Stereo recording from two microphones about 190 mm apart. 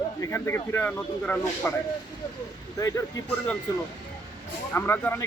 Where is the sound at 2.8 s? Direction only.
15° left (ahead or behind).